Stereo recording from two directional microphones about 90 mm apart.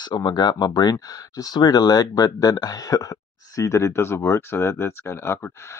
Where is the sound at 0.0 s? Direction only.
55° left (ahead or behind).